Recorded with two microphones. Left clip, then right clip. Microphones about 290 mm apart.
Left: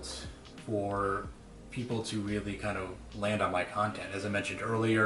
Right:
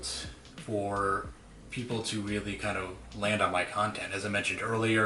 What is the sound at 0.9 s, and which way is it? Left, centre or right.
Speech, centre.